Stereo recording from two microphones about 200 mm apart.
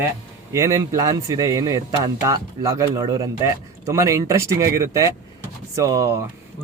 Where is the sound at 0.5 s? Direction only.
15° right (ahead or behind).